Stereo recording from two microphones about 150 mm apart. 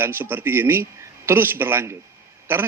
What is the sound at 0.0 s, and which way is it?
Speech, 15° right (ahead or behind).